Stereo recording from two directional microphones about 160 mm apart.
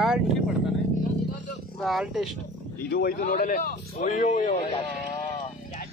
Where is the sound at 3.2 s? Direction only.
55° left (ahead or behind).